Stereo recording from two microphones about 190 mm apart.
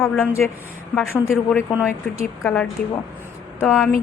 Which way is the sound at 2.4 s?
5° left (ahead or behind).